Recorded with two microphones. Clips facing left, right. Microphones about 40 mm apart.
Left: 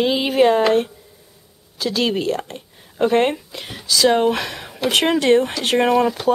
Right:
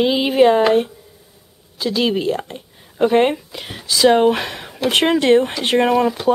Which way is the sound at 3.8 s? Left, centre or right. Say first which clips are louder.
Right 2 dB; right.